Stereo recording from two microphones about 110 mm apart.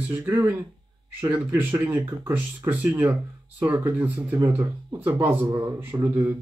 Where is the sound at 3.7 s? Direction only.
30° right (ahead or behind).